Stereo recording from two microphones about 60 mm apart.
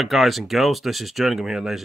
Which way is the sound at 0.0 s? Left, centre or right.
Centre.